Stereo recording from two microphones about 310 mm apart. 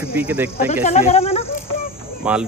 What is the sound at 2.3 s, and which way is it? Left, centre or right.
Speech, centre.